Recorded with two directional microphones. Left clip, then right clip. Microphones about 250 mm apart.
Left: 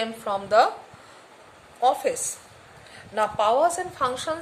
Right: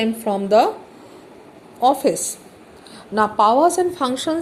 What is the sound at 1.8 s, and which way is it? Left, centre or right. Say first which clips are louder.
A woman's voice: right 5 dB; centre.